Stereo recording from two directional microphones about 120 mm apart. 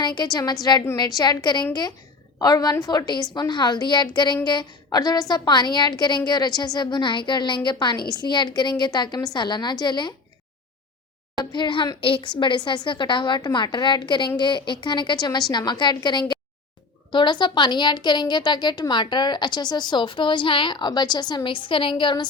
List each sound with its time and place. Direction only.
0.0 s a woman's voice: 35° left (ahead or behind)
11.5 s a woman's voice: 40° left (ahead or behind)